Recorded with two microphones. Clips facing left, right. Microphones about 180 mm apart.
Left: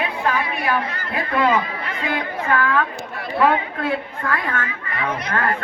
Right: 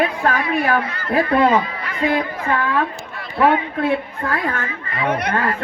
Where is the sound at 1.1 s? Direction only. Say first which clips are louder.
Right 4 dB; 35° right (ahead or behind).